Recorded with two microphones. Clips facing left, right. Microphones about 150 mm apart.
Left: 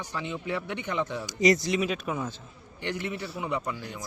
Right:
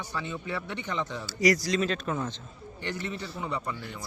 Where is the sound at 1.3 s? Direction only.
20° left (ahead or behind).